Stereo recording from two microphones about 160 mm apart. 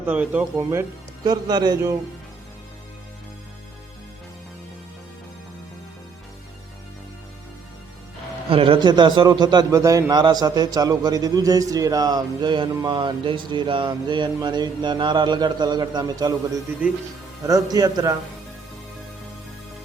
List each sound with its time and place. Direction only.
0.0 s speech: 10° right (ahead or behind)
8.4 s a man's voice: 35° right (ahead or behind)
17.4 s a man's voice: 25° right (ahead or behind)